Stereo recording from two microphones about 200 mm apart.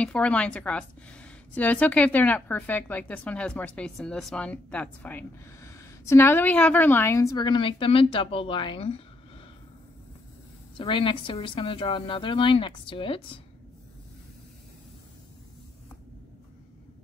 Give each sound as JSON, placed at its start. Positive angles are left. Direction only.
{"t": 0.0, "sound": "a woman's voice", "side_deg": 5}
{"t": 10.8, "sound": "a woman's voice", "side_deg": 25}